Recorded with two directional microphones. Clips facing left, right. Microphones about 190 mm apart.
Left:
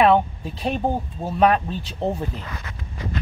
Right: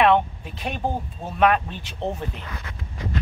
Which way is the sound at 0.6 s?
35° left (ahead or behind).